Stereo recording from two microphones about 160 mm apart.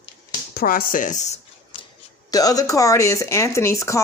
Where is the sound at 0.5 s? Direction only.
65° left (ahead or behind); by 1.4 s 45° left (ahead or behind).